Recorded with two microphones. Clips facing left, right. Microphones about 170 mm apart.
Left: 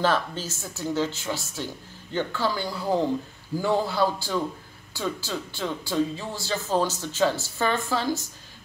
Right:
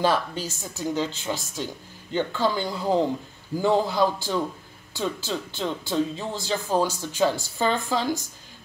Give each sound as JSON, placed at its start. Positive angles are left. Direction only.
{"t": 0.0, "sound": "speech", "side_deg": -15}